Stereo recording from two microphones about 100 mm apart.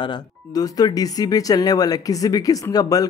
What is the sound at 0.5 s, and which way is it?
Speech, 40° left (ahead or behind).